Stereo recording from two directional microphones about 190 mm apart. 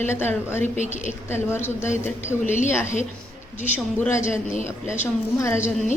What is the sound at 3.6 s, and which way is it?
Speech, 10° left (ahead or behind).